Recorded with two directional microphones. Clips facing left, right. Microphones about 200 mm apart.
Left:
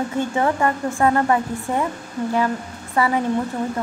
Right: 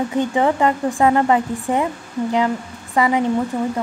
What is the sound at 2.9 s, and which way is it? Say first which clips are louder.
Speech: right 2 dB; 15° right (ahead or behind).